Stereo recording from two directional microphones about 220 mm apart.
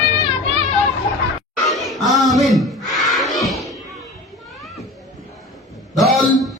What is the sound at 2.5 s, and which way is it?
Crowd, centre (ahead or behind).